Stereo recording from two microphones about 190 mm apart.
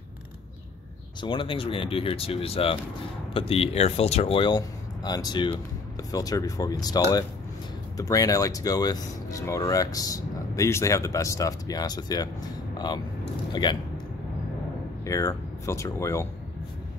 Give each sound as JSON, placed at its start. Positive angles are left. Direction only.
{"t": 1.2, "sound": "speech", "side_deg": 25}
{"t": 15.0, "sound": "speech", "side_deg": 15}